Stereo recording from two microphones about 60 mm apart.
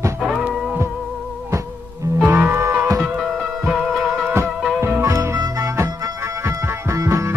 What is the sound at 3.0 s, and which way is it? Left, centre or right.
Music, centre.